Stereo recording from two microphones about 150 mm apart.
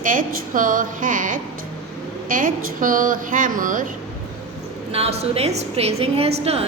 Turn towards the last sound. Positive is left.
turn(degrees=-45)  # may be behind; listen again after turning